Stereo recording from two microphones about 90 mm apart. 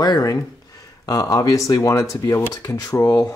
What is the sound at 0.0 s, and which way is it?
Speech, 45° left (ahead or behind).